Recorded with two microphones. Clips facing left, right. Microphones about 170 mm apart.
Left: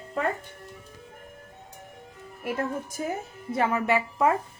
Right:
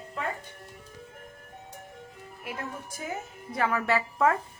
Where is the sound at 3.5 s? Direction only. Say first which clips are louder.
Left 3 dB; 25° left (ahead or behind).